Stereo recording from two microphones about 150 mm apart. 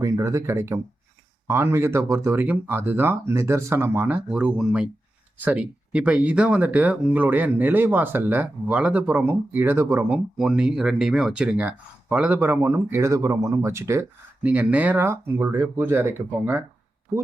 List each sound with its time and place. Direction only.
0.0 s speech: 20° right (ahead or behind)
10.3 s speech: 5° right (ahead or behind)